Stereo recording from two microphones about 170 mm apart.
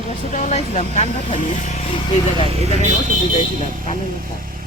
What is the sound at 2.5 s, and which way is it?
Speech, 40° right (ahead or behind).